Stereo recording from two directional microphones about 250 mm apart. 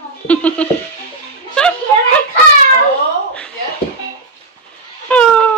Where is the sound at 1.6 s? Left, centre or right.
Centre.